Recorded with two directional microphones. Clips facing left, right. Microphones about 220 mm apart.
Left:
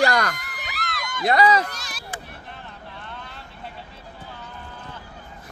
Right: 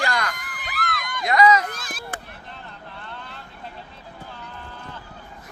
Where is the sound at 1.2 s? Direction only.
30° left (ahead or behind).